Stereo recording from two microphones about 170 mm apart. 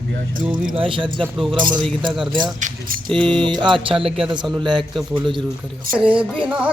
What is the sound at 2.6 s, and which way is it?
Speech, 50° right (ahead or behind).